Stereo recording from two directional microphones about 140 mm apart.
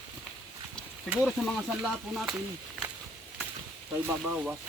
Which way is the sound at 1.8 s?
5° right (ahead or behind).